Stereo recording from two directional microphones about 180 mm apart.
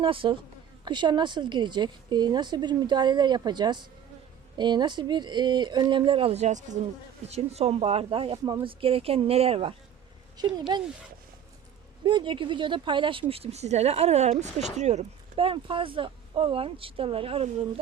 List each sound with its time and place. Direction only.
0.0 s a woman's voice: 30° right (ahead or behind)
12.0 s speech: 25° right (ahead or behind)